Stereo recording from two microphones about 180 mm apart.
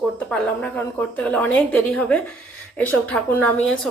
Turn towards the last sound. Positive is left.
turn(degrees=5)  # may be behind; listen again after turning